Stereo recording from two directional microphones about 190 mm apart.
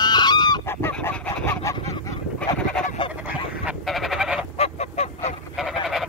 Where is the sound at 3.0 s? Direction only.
25° left (ahead or behind).